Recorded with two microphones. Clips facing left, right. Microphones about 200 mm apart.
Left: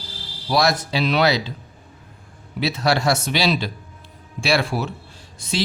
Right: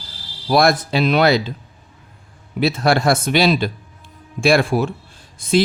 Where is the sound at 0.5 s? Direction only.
55° right (ahead or behind).